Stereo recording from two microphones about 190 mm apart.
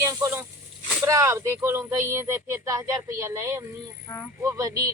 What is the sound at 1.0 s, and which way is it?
Speech, 15° right (ahead or behind).